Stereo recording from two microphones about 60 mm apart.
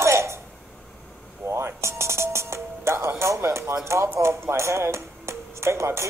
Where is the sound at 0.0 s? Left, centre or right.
Right.